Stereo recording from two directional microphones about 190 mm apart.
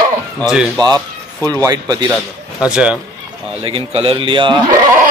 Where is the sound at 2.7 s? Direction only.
5° right (ahead or behind).